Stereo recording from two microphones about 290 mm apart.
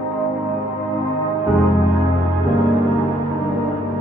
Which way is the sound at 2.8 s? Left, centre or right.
Centre.